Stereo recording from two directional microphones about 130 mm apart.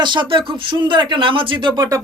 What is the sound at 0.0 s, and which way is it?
Speech, 40° right (ahead or behind).